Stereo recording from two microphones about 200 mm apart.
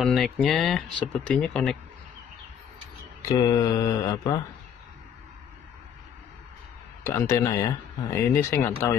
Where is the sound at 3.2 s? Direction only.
20° left (ahead or behind).